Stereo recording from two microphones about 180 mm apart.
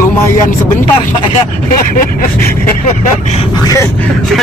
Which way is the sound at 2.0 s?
50° left (ahead or behind).